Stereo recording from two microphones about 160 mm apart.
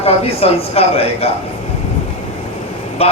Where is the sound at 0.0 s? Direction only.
40° left (ahead or behind).